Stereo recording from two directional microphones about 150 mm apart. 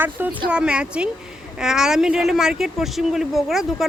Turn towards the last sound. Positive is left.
turn(degrees=0)  # may be behind; listen again after turning